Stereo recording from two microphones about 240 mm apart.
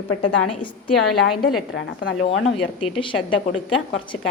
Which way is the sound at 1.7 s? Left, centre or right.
Left.